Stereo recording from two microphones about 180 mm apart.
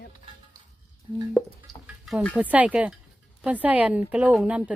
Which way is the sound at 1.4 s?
Centre (ahead or behind).